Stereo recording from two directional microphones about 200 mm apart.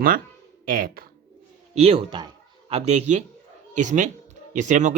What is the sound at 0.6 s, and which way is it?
Speech, 45° right (ahead or behind).